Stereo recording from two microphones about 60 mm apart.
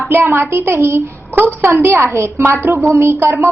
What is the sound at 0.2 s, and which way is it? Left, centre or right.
A woman's voice, right.